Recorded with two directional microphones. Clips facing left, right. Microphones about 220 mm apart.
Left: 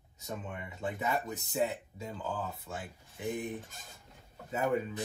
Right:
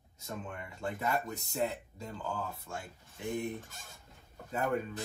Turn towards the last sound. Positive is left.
turn(degrees=5)  # may be behind; listen again after turning